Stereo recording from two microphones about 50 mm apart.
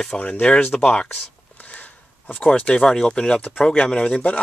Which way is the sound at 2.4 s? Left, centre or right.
Centre.